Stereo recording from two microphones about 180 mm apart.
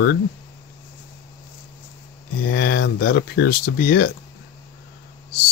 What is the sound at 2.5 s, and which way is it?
Speech, 60° left (ahead or behind).